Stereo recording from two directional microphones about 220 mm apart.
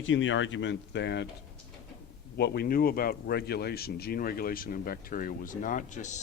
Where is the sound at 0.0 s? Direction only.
60° left (ahead or behind).